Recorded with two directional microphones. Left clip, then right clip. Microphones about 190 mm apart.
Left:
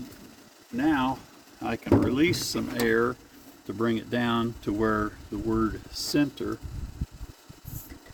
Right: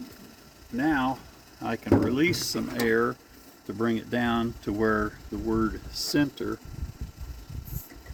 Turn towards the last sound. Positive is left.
turn(degrees=-15)  # may be behind; listen again after turning